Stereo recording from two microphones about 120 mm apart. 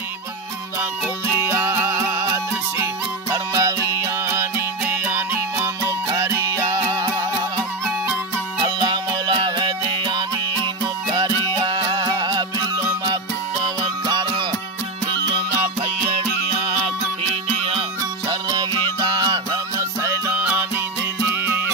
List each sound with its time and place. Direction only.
1.4 s music: 20° right (ahead or behind); by 10.2 s 40° right (ahead or behind)
11.6 s music: 40° right (ahead or behind)
14.0 s music: 35° right (ahead or behind)
16.5 s music: 50° right (ahead or behind)
18.3 s music: 35° right (ahead or behind)
19.8 s music: 25° right (ahead or behind)